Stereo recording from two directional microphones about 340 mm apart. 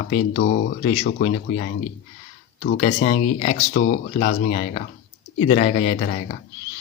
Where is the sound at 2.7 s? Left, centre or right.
Centre.